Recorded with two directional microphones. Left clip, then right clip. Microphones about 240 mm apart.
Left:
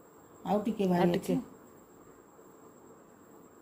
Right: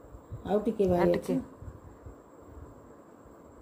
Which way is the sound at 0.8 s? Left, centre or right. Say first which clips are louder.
Right 3 dB; centre.